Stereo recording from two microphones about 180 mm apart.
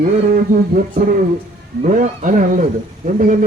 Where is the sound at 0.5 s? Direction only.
50° right (ahead or behind).